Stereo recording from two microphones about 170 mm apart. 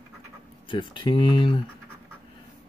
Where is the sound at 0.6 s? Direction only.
30° left (ahead or behind).